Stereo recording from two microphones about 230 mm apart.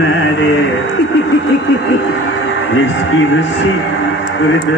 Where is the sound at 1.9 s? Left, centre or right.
Left.